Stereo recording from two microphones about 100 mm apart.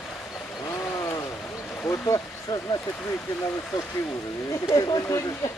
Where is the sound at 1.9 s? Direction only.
35° left (ahead or behind).